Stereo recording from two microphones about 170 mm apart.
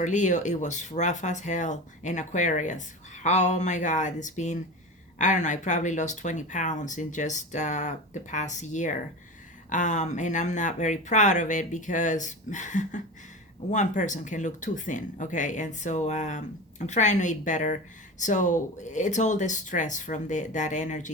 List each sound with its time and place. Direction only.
0.0 s speech: 45° left (ahead or behind)